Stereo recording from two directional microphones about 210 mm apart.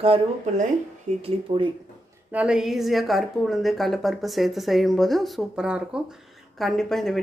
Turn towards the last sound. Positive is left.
turn(degrees=0)  # may be behind; listen again after turning